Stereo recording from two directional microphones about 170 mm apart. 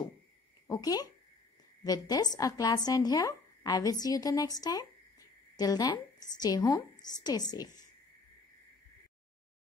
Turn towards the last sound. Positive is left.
turn(degrees=25)  # may be behind; listen again after turning